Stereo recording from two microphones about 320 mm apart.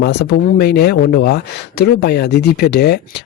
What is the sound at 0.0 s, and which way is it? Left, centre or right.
Speech, left.